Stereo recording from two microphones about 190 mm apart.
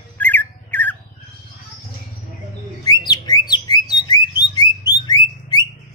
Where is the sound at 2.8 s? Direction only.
20° left (ahead or behind).